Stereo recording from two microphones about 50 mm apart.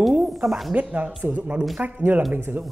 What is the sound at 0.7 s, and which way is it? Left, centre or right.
Speech, right.